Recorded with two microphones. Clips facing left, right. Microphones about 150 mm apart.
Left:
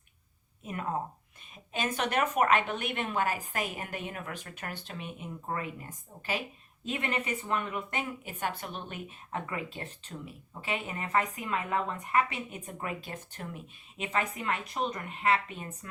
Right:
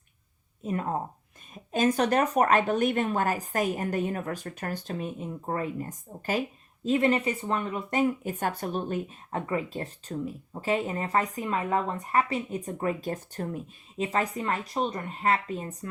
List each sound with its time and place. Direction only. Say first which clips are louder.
0.6 s speech: right 4 dB; 35° right (ahead or behind)
6.8 s speech: right 9 dB; 35° right (ahead or behind)